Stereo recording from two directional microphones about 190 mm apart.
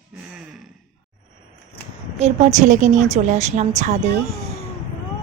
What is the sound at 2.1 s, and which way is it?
A woman's voice, 35° right (ahead or behind).